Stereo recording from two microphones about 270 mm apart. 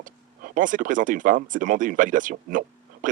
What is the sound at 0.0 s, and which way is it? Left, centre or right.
Speech, right.